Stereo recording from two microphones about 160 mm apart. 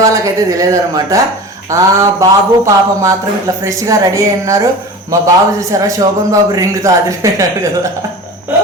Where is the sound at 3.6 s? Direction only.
20° right (ahead or behind).